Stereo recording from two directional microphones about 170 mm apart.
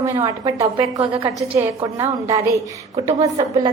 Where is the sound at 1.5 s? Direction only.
10° right (ahead or behind).